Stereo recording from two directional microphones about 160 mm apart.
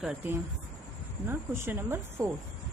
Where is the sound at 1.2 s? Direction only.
15° right (ahead or behind).